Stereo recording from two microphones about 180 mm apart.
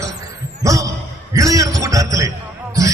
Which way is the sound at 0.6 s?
20° right (ahead or behind).